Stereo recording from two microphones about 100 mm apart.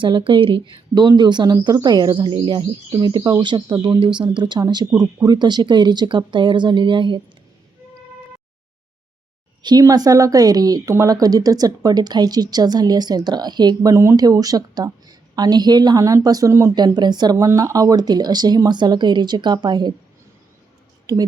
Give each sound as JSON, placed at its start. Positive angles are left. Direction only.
{"t": 0.0, "sound": "a woman's voice", "side_deg": -55}
{"t": 0.9, "sound": "a woman's voice", "side_deg": -45}
{"t": 9.6, "sound": "a woman's voice", "side_deg": -40}
{"t": 13.9, "sound": "speech", "side_deg": -25}
{"t": 14.2, "sound": "a woman's voice", "side_deg": -40}
{"t": 16.7, "sound": "a woman's voice", "side_deg": -45}
{"t": 17.3, "sound": "a woman's voice", "side_deg": -35}
{"t": 21.1, "sound": "a woman's voice", "side_deg": -40}